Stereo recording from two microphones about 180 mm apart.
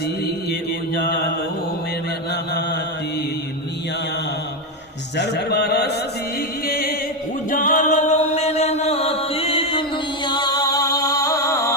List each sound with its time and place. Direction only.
0.9 s mantra: 65° left (ahead or behind)
2.3 s mantra: 65° left (ahead or behind)
5.1 s a sound: 70° left (ahead or behind)
6.7 s music: 55° left (ahead or behind); by 11.7 s 15° left (ahead or behind)